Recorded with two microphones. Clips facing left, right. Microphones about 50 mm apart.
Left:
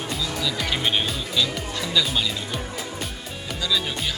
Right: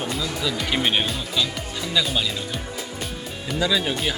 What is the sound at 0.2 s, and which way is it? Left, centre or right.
Speech, centre.